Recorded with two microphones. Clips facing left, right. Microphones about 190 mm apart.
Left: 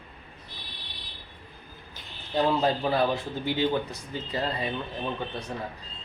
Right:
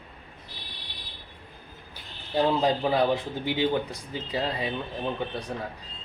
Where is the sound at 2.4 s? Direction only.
15° right (ahead or behind).